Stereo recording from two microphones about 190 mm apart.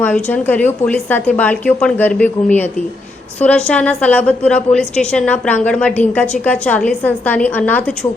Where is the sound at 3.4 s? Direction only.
5° left (ahead or behind).